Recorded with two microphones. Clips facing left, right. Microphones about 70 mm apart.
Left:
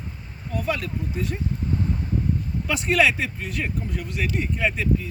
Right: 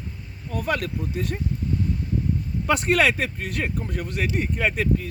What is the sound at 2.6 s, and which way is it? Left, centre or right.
Speech, right.